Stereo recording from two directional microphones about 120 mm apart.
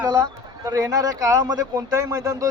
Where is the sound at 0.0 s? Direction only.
30° right (ahead or behind).